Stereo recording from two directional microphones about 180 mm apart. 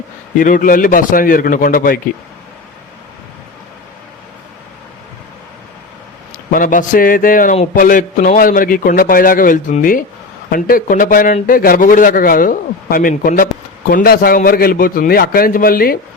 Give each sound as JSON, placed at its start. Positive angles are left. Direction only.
{"t": 0.3, "sound": "a man's voice", "side_deg": 50}
{"t": 6.5, "sound": "a man's voice", "side_deg": 50}